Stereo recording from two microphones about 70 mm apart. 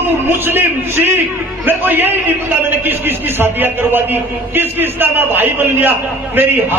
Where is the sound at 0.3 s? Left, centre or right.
Right.